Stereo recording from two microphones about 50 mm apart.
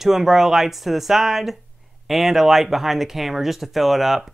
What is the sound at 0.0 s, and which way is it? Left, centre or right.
Speech, centre.